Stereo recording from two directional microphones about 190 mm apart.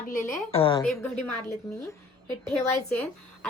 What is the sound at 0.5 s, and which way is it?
Speech, 30° left (ahead or behind).